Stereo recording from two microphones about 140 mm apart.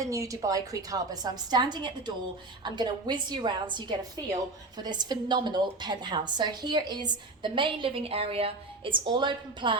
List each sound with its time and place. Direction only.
0.0 s a woman's voice: 25° right (ahead or behind)